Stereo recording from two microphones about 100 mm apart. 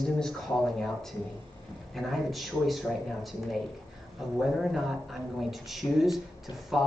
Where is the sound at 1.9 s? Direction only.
Centre (ahead or behind).